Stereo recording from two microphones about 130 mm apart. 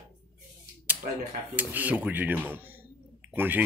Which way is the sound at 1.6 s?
15° right (ahead or behind).